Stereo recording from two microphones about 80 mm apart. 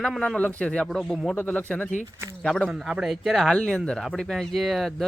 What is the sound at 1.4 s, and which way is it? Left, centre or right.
Speech, centre.